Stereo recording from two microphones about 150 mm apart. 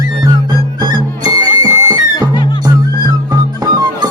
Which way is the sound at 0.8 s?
25° right (ahead or behind).